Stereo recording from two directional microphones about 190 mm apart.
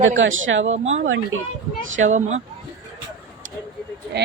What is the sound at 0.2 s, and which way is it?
A man's voice, 90° right.